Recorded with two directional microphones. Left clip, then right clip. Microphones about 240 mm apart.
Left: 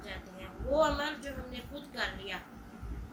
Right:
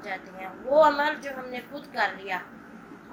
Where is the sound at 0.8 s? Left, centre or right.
Left.